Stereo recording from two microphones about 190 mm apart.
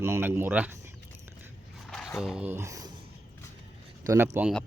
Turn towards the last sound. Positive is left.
turn(degrees=-10)  # may be behind; listen again after turning